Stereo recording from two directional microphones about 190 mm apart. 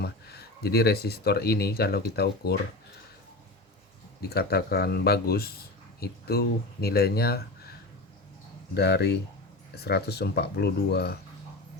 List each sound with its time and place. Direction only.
0.0 s speech: 55° left (ahead or behind)
4.2 s speech: 55° left (ahead or behind)
8.7 s speech: 60° left (ahead or behind)